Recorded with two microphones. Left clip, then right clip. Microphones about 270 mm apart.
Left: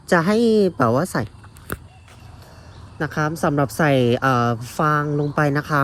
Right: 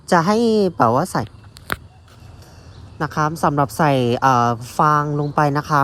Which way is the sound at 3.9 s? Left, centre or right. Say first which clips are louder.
Right 3 dB; centre.